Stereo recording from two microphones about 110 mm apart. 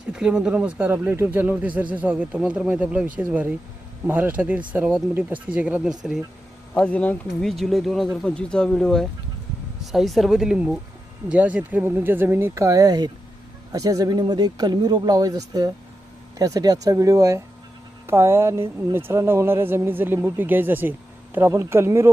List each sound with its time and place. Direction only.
0.1 s speech: 5° right (ahead or behind)
6.7 s speech: 10° left (ahead or behind)
7.4 s speech: centre (ahead or behind); by 22.1 s 25° right (ahead or behind)